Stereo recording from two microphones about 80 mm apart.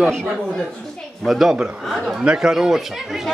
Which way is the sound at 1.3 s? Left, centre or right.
Centre.